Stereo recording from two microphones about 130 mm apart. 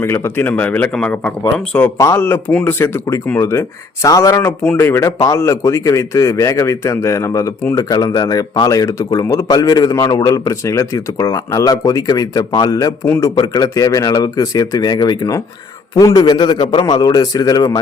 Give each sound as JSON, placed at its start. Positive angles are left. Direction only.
{"t": 0.0, "sound": "a man's voice", "side_deg": 20}